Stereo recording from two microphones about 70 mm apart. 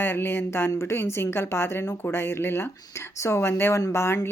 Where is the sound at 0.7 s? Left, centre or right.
Left.